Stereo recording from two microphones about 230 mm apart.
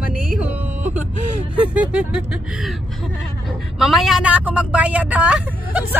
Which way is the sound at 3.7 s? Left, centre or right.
Centre.